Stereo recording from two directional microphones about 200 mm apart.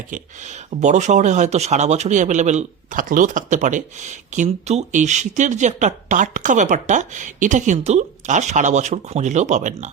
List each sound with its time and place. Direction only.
0.1 s speech: 35° right (ahead or behind)